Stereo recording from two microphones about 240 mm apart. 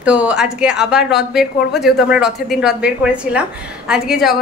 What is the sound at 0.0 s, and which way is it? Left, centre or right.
A woman's voice, centre.